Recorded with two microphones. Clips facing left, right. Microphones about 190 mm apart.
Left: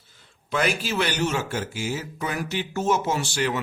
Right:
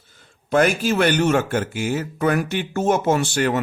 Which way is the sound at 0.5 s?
50° right (ahead or behind).